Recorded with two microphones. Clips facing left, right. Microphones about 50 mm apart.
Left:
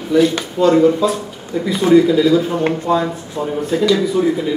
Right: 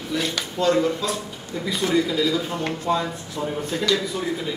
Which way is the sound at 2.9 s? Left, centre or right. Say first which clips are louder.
Left 7 dB; centre.